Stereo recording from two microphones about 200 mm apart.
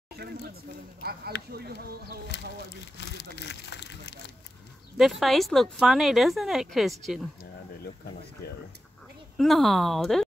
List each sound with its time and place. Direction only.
1.5 s speech: 50° right (ahead or behind)
3.0 s speech: 60° left (ahead or behind)
4.9 s speech: centre (ahead or behind)
9.4 s speech: centre (ahead or behind)